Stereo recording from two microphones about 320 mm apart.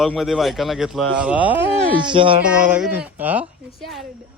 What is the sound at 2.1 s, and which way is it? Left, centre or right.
Speech, centre.